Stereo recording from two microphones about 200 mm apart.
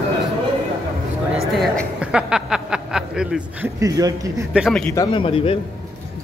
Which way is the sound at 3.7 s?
15° right (ahead or behind).